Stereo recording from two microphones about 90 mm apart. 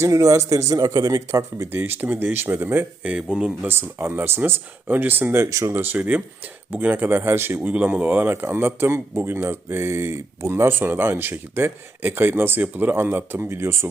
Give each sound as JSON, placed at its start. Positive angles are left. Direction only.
{"t": 0.0, "sound": "speech", "side_deg": -40}
{"t": 1.7, "sound": "speech", "side_deg": -25}
{"t": 3.7, "sound": "speech", "side_deg": -25}
{"t": 5.5, "sound": "speech", "side_deg": -35}
{"t": 5.7, "sound": "speech", "side_deg": -20}
{"t": 7.7, "sound": "speech", "side_deg": -15}